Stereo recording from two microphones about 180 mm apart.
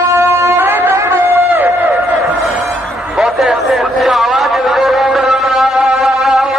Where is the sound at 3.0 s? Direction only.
Centre (ahead or behind).